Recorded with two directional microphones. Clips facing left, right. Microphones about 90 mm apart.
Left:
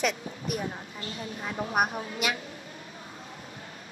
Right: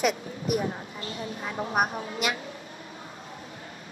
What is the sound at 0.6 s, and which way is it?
A woman's voice, 30° right (ahead or behind).